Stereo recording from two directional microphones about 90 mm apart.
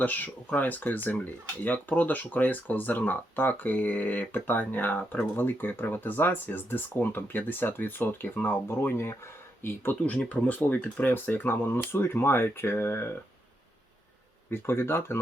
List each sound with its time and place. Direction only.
0.0 s speech: 20° left (ahead or behind)
14.5 s speech: 25° left (ahead or behind)